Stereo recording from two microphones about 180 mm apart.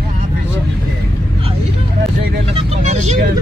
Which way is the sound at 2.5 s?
35° right (ahead or behind).